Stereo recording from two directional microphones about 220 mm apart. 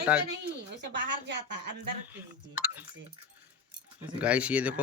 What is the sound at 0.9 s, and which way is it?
Speech, 55° right (ahead or behind).